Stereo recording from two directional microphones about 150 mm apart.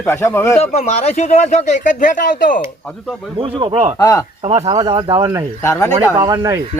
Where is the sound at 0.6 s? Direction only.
45° left (ahead or behind); by 2.6 s 65° left (ahead or behind).